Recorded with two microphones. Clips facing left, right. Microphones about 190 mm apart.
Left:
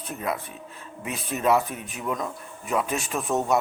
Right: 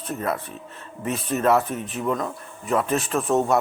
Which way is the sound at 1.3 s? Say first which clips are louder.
Right 4 dB; 40° right (ahead or behind).